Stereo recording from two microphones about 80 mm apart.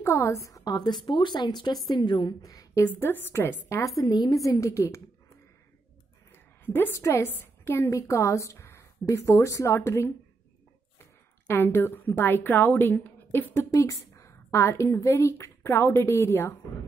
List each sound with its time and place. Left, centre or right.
0.0 s a woman's voice: left
2.4 s a woman's voice: left
3.0 s a woman's voice: left
4.0 s a woman's voice: left
4.4 s a woman's voice: left
6.3 s a sound: left
7.0 s a woman's voice: left
11.4 s a woman's voice: left
13.7 s a woman's voice: left